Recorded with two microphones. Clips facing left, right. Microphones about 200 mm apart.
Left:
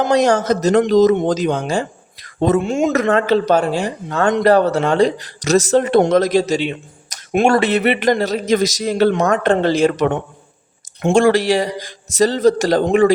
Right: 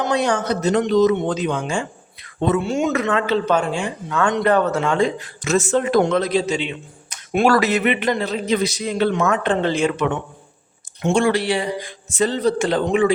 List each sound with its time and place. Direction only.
0.0 s a man's voice: 40° left (ahead or behind)
2.5 s a man's voice: 50° left (ahead or behind)
7.4 s a man's voice: 30° left (ahead or behind); by 13.1 s 45° left (ahead or behind)